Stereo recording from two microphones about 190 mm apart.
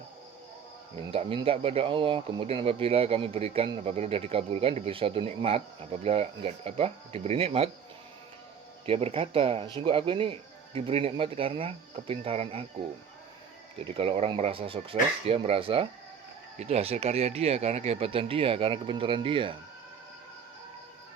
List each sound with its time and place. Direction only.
0.9 s speech: 30° right (ahead or behind)
8.9 s speech: 30° right (ahead or behind)
13.7 s speech: 30° right (ahead or behind)